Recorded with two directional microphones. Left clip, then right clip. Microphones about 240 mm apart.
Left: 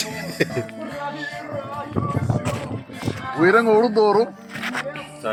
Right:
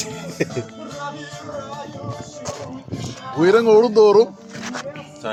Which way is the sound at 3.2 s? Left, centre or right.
Right.